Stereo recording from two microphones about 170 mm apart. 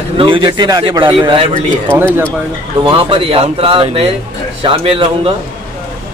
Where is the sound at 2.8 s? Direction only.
30° right (ahead or behind).